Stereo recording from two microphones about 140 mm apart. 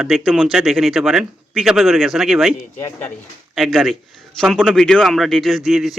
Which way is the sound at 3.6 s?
Centre (ahead or behind).